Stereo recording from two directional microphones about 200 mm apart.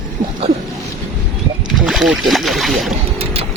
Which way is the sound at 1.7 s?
Centre (ahead or behind).